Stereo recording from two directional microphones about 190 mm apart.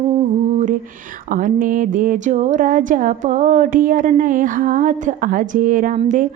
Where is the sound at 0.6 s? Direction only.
45° right (ahead or behind).